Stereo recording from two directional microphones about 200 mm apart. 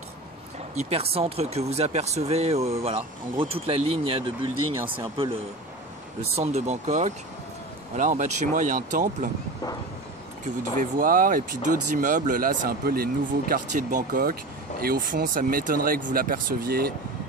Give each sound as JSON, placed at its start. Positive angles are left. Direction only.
{"t": 0.7, "sound": "speech", "side_deg": -30}
{"t": 6.3, "sound": "speech", "side_deg": -35}
{"t": 10.8, "sound": "speech", "side_deg": -45}